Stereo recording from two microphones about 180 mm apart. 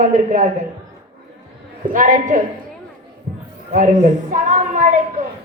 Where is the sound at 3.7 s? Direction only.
45° right (ahead or behind).